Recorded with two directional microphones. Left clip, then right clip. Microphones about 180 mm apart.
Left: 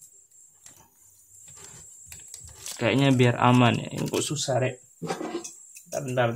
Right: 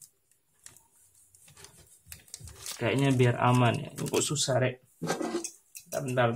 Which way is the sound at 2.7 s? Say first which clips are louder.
Left 5 dB; 25° left (ahead or behind).